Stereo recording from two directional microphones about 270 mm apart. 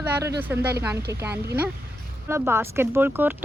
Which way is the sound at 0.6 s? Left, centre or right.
Right.